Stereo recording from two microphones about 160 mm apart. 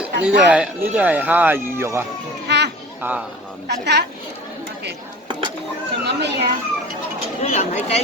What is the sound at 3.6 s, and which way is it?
Speech, 90° right.